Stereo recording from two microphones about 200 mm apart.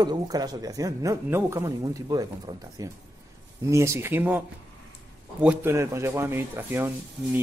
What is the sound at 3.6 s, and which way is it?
Speech, 15° right (ahead or behind).